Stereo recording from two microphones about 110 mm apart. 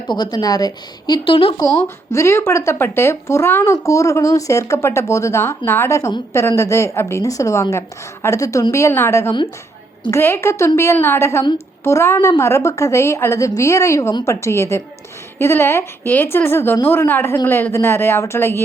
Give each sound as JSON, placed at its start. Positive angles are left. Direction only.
{"t": 0.1, "sound": "a woman's voice", "side_deg": 40}
{"t": 1.5, "sound": "speech", "side_deg": 25}